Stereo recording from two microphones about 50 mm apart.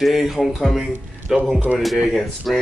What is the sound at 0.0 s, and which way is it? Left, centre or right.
Speech, centre.